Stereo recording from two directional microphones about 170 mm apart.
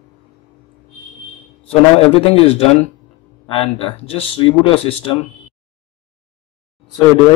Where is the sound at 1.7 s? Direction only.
35° left (ahead or behind).